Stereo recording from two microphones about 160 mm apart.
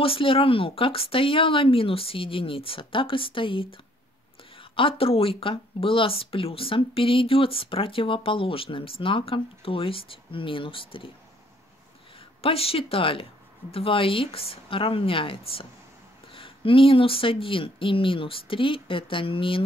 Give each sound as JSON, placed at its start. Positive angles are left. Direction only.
{"t": 0.0, "sound": "speech", "side_deg": 35}
{"t": 12.4, "sound": "speech", "side_deg": 35}